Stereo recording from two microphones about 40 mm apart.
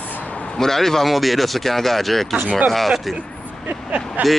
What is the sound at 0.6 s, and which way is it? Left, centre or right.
Speech, centre.